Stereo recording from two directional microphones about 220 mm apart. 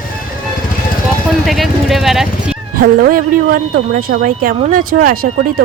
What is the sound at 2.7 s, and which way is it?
Speech, 40° right (ahead or behind).